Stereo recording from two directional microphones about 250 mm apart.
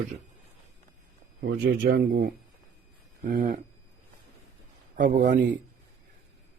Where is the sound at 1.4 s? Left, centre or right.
Right.